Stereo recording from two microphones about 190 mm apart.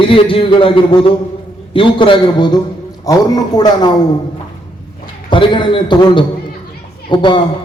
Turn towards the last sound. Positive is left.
turn(degrees=25)  # may be behind; listen again after turning